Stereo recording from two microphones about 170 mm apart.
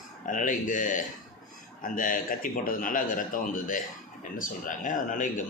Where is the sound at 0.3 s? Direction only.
50° left (ahead or behind).